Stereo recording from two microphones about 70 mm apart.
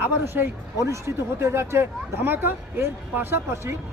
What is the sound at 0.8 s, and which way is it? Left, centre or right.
Speech, right.